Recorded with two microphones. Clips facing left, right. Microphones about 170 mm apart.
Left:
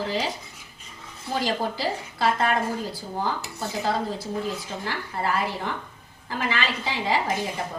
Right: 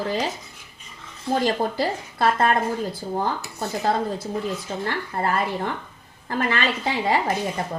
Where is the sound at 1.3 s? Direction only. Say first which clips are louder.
Right 4 dB; 50° right (ahead or behind).